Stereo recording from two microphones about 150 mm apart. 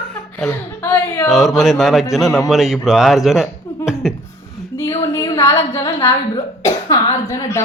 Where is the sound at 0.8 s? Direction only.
15° left (ahead or behind).